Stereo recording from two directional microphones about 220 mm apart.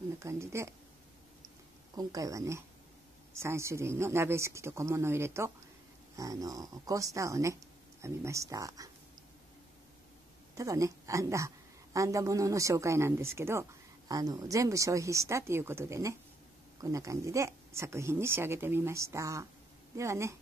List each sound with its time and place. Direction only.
0.2 s a woman's voice: 15° right (ahead or behind)
2.0 s a woman's voice: 15° right (ahead or behind)
10.6 s a woman's voice: 15° right (ahead or behind)